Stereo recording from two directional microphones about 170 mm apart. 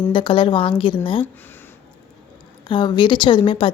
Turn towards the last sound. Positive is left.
turn(degrees=30)  # may be behind; listen again after turning